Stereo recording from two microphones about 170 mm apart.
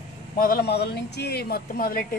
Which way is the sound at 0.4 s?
65° left (ahead or behind).